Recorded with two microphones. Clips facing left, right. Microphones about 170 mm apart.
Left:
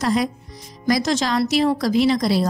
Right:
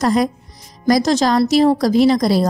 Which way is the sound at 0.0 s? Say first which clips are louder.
Right 4 dB; 45° right (ahead or behind).